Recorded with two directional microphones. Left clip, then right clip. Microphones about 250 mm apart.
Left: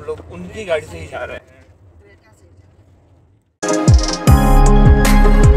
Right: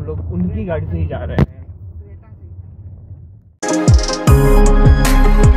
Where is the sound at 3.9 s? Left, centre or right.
Centre.